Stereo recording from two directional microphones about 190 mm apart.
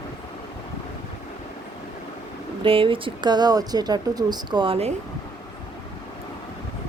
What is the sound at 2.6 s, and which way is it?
Speech, 30° right (ahead or behind).